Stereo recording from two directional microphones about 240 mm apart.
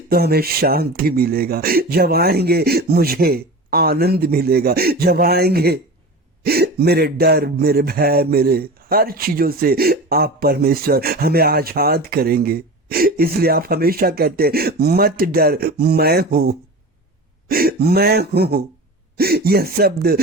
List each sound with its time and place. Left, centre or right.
0.1 s speech: right